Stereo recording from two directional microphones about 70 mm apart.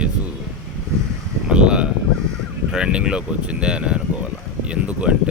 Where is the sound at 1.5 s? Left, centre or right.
Centre.